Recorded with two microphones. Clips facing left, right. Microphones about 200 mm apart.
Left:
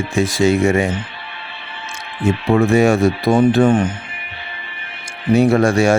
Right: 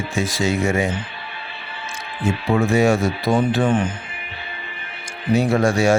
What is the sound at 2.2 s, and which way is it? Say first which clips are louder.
Speech: left 4 dB; 55° left (ahead or behind).